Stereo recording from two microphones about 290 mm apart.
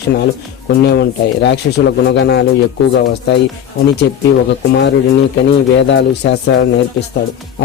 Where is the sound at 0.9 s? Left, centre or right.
Left.